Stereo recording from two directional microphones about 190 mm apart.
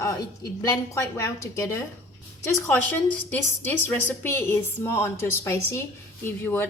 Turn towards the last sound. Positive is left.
turn(degrees=10)  # may be behind; listen again after turning